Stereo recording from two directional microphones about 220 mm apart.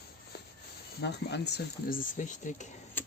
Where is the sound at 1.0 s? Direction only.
50° left (ahead or behind).